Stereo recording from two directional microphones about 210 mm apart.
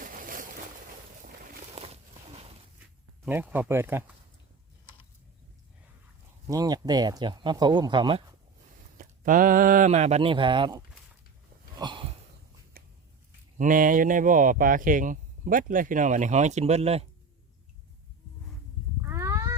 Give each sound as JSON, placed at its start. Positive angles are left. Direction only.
{"t": 0.0, "sound": "boat", "side_deg": -40}
{"t": 1.7, "sound": "a sound", "side_deg": -30}
{"t": 3.2, "sound": "speech", "side_deg": -10}
{"t": 6.5, "sound": "speech", "side_deg": -15}
{"t": 9.0, "sound": "speech", "side_deg": -40}
{"t": 11.8, "sound": "sniff", "side_deg": -20}
{"t": 12.7, "sound": "biting", "side_deg": -45}
{"t": 13.6, "sound": "speech", "side_deg": -40}
{"t": 19.0, "sound": "a sound", "side_deg": -15}